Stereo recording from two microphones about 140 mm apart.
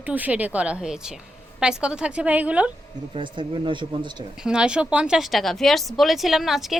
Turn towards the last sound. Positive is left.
turn(degrees=0)  # may be behind; listen again after turning